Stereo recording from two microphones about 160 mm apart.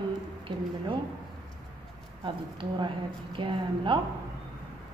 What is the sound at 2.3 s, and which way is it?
A woman's voice, 30° right (ahead or behind).